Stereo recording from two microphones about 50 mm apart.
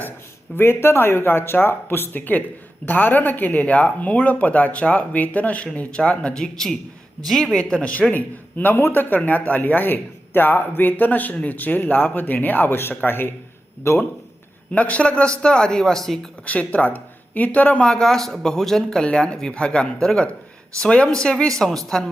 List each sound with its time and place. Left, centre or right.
0.5 s a man's voice: left; by 7.6 s centre
7.7 s speech: left
8.1 s a man's voice: left
13.8 s a man's voice: left
14.7 s a man's voice: left; by 16.2 s centre
16.5 s speech: left
17.8 s a man's voice: centre